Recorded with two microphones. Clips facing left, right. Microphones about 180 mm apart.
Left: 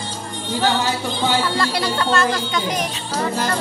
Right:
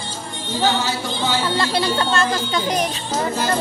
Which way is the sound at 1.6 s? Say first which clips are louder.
Right 1 dB; 25° right (ahead or behind).